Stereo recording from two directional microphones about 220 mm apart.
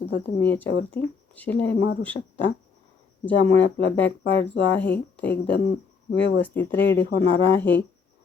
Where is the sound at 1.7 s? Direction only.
50° left (ahead or behind).